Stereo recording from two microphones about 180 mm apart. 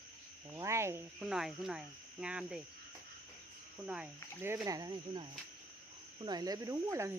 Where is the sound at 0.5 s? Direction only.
15° right (ahead or behind).